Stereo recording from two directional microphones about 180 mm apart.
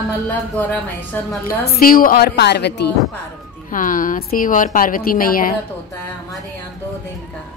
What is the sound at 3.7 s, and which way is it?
A woman's voice, 45° left (ahead or behind).